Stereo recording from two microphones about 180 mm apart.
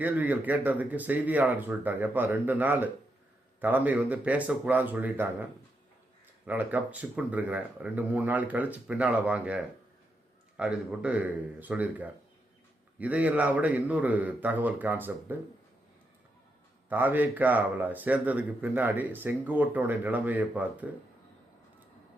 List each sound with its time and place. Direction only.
0.0 s speech: 10° right (ahead or behind)
10.6 s speech: 5° right (ahead or behind)
16.9 s speech: 10° right (ahead or behind)